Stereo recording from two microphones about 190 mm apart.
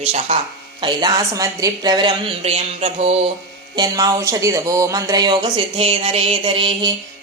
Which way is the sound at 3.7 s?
20° right (ahead or behind).